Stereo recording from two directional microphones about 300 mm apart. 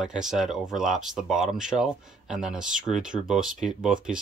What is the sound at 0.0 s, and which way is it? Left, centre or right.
Speech, centre.